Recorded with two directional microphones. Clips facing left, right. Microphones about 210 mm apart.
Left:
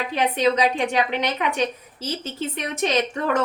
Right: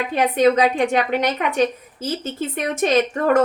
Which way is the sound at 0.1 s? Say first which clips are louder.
Right 5 dB; 50° right (ahead or behind).